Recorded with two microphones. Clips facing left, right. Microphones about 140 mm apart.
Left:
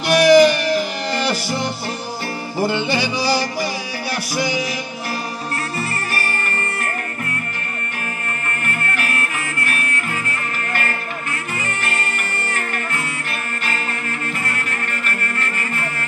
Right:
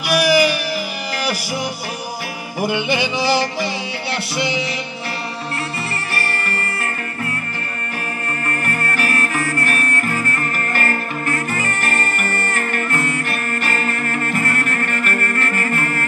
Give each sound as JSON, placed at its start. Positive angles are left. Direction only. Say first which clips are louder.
{"t": 0.0, "sound": "music", "louder": "left 5 dB", "side_deg": -10}
{"t": 8.6, "sound": "music", "louder": "right 2 dB", "side_deg": -40}